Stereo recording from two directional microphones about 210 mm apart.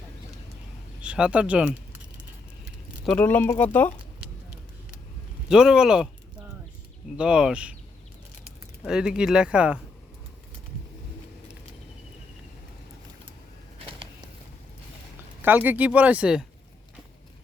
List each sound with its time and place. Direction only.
1.0 s speech: 5° right (ahead or behind)
3.1 s speech: 5° left (ahead or behind)
5.5 s speech: 5° right (ahead or behind)
7.2 s speech: 5° right (ahead or behind)
8.9 s speech: 5° right (ahead or behind)
13.7 s a sound: 25° right (ahead or behind)
15.4 s speech: 10° right (ahead or behind)